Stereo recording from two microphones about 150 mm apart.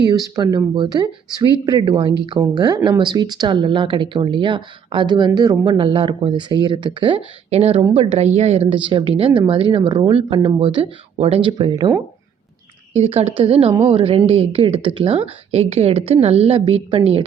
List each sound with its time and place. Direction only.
0.1 s speech: 25° right (ahead or behind)
12.9 s speech: 45° right (ahead or behind)